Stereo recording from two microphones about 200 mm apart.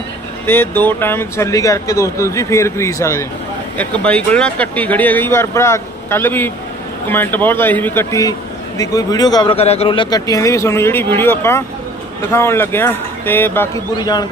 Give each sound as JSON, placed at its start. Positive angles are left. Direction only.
{"t": 0.4, "sound": "a man's voice", "side_deg": 10}